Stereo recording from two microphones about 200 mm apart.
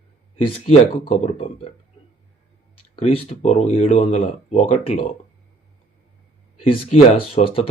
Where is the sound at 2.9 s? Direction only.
30° left (ahead or behind).